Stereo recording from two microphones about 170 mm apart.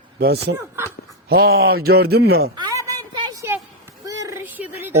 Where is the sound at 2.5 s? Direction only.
20° right (ahead or behind).